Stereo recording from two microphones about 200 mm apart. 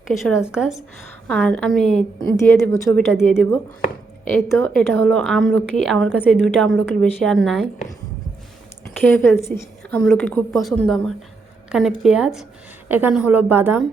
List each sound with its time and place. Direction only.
0.1 s a woman's voice: centre (ahead or behind)
2.5 s a woman's voice: 15° left (ahead or behind)
2.9 s a woman's voice: centre (ahead or behind)
4.4 s a woman's voice: 15° left (ahead or behind)
8.9 s a woman's voice: 5° left (ahead or behind); by 13.8 s 10° right (ahead or behind)